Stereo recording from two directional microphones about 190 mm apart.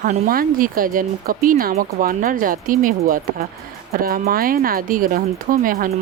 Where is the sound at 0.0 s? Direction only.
45° right (ahead or behind).